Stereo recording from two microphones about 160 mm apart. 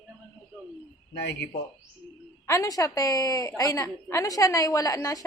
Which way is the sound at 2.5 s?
20° left (ahead or behind).